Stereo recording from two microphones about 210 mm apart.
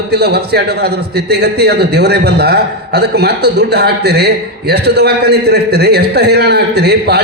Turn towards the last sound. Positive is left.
turn(degrees=-50)  # may be behind; listen again after turning